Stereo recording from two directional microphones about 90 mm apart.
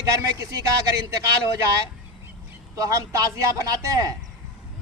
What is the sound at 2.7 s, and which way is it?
Speech, 35° right (ahead or behind).